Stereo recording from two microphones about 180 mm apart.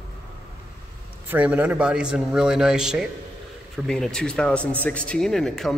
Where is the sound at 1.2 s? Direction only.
10° right (ahead or behind).